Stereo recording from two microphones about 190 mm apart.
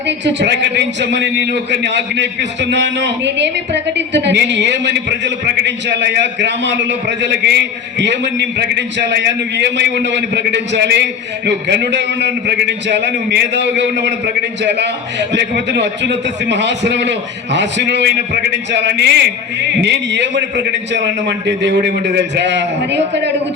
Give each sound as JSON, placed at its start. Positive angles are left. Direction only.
{"t": 0.3, "sound": "a man's voice", "side_deg": -65}